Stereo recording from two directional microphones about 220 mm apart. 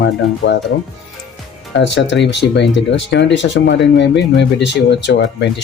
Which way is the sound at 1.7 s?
55° left (ahead or behind).